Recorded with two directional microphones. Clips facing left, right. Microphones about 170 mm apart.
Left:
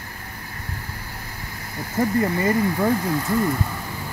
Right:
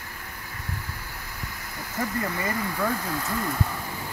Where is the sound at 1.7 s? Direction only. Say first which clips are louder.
Left 9 dB; 40° left (ahead or behind).